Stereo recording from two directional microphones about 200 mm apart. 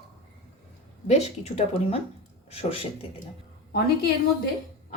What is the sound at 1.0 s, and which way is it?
A woman's voice, 30° left (ahead or behind).